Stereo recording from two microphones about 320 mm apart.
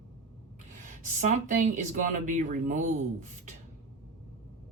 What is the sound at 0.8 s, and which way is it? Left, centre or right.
Speech, right.